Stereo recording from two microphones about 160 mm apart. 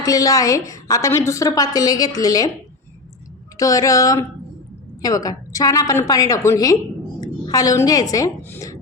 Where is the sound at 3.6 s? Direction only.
20° left (ahead or behind).